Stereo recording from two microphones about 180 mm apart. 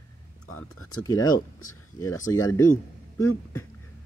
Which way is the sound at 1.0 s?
20° left (ahead or behind).